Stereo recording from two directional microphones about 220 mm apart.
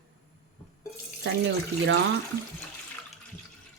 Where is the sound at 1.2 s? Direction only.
55° right (ahead or behind).